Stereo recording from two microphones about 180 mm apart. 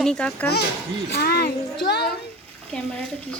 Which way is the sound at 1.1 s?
60° left (ahead or behind).